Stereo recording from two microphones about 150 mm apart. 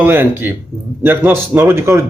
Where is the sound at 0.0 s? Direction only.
15° right (ahead or behind).